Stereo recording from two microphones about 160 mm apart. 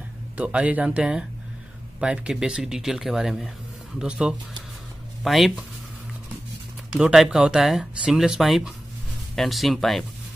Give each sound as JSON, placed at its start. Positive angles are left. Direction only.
{"t": 0.4, "sound": "speech", "side_deg": -10}
{"t": 7.0, "sound": "speech", "side_deg": -5}